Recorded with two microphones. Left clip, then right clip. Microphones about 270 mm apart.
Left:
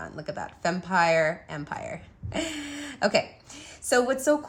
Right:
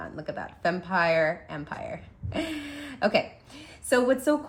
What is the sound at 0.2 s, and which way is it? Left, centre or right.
A woman's voice, left.